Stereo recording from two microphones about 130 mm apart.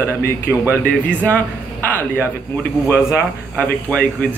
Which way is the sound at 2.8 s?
20° left (ahead or behind).